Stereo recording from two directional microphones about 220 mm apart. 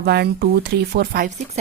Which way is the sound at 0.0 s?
45° right (ahead or behind).